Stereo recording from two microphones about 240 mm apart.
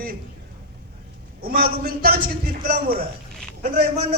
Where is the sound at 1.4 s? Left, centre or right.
Right.